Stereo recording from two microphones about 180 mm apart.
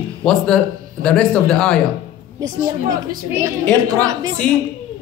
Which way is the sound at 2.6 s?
20° right (ahead or behind).